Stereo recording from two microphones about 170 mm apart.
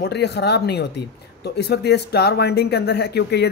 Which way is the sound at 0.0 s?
75° left (ahead or behind).